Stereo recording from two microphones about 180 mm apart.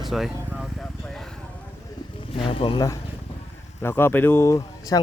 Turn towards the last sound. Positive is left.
turn(degrees=20)  # may be behind; listen again after turning